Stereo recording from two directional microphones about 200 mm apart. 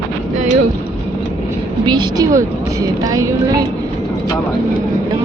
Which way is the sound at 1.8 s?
20° right (ahead or behind).